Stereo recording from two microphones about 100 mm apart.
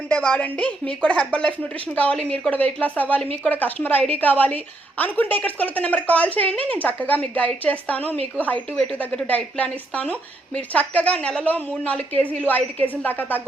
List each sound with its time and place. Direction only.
0.1 s a woman's voice: 10° left (ahead or behind)